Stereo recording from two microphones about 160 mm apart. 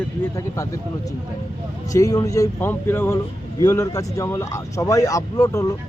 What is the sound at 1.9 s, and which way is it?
Speech, 20° left (ahead or behind).